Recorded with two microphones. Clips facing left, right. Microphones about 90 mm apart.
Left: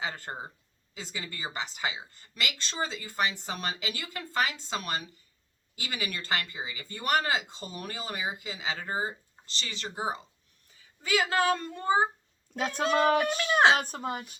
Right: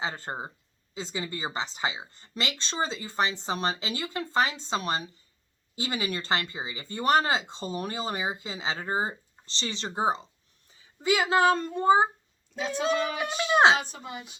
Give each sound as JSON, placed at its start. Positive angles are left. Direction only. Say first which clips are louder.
{"t": 0.0, "sound": "speech", "louder": "right 3 dB", "side_deg": -25}
{"t": 12.5, "sound": "speech", "louder": "left 1 dB", "side_deg": 50}
{"t": 13.3, "sound": "speech", "louder": "right 2 dB", "side_deg": -15}
{"t": 13.7, "sound": "speech", "louder": "left 2 dB", "side_deg": 50}